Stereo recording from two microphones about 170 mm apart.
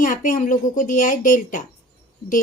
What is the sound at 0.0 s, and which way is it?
A woman's voice, 50° left (ahead or behind).